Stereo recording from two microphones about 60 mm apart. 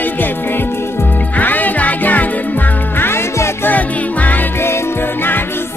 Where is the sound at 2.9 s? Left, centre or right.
Left.